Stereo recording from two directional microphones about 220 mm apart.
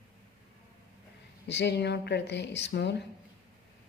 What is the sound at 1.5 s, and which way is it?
A woman's voice, 50° left (ahead or behind).